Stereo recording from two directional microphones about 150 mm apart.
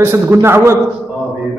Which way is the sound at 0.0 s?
15° right (ahead or behind).